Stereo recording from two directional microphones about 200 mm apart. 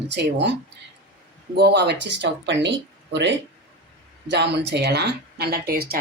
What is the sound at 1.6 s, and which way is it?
Speech, 55° right (ahead or behind).